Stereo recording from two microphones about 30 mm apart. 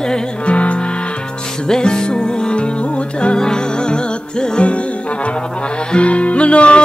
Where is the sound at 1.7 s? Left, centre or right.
Left.